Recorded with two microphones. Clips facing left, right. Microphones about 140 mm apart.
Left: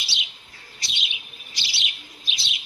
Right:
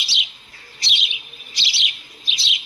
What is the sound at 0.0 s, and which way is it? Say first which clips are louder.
Chirp: right 3 dB; 80° right.